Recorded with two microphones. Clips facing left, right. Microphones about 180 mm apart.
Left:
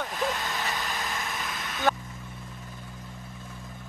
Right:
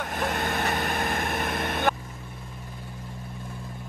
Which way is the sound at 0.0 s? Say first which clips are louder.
Right 2 dB; 55° right (ahead or behind).